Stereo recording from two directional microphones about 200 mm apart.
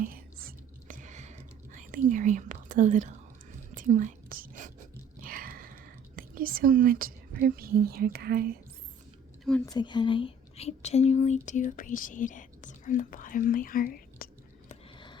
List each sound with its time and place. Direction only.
0.0 s whispering: 45° right (ahead or behind)
9.4 s speech: 5° left (ahead or behind)
9.6 s speech: 20° left (ahead or behind); by 14.3 s 45° left (ahead or behind)
14.9 s a sound: 25° left (ahead or behind)